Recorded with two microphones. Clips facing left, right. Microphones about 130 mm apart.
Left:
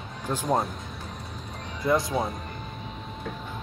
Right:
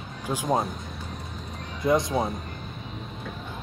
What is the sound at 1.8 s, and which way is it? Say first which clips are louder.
Speech: right 2 dB; 20° right (ahead or behind).